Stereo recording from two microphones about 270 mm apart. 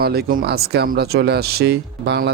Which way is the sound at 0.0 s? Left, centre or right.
Right.